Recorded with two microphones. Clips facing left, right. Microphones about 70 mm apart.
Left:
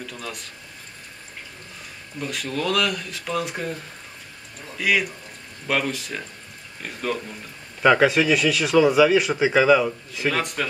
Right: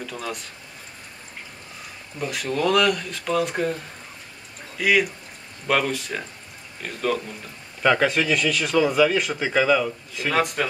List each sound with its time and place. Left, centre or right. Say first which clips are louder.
0.0 s speech: right 3 dB; centre
2.1 s speech: right 2 dB; centre
10.3 s speech: right 8 dB; centre